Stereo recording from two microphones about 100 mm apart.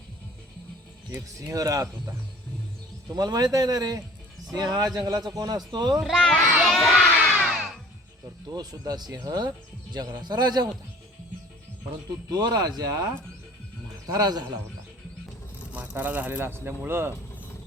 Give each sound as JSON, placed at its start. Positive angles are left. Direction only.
{"t": 1.4, "sound": "a man's voice", "side_deg": -35}
{"t": 3.1, "sound": "a man's voice", "side_deg": -40}
{"t": 6.0, "sound": "speech", "side_deg": 0}
{"t": 6.7, "sound": "child singing", "side_deg": 5}
{"t": 7.4, "sound": "music", "side_deg": 0}
{"t": 8.5, "sound": "a man's voice", "side_deg": -40}
{"t": 12.3, "sound": "a man's voice", "side_deg": -45}
{"t": 14.1, "sound": "a man's voice", "side_deg": -40}
{"t": 15.7, "sound": "speech", "side_deg": -15}